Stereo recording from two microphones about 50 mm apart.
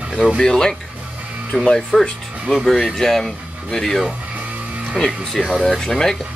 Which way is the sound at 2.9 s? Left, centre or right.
Centre.